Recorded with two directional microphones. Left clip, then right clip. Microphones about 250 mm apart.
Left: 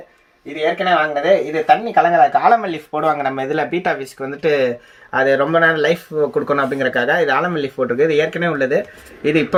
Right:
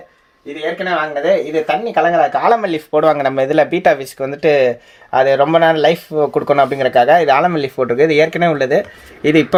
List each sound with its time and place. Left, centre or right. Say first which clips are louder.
0.9 s speech: even; centre; by 8.8 s right